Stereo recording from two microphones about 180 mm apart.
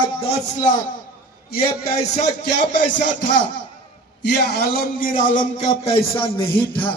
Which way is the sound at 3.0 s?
90° left.